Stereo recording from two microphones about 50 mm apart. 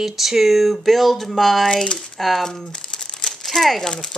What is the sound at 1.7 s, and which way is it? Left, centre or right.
Speech, centre.